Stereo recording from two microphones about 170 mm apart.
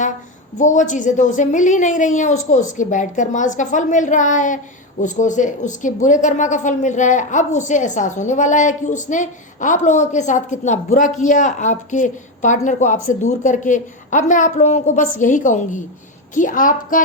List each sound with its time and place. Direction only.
0.6 s a woman's voice: 45° left (ahead or behind)